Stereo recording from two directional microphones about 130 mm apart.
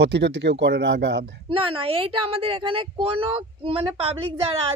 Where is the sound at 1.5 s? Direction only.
40° right (ahead or behind).